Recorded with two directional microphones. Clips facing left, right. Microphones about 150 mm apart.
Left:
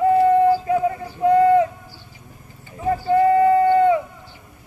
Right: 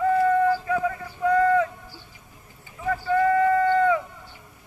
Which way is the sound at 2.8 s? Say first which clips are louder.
Left 5 dB; 30° left (ahead or behind).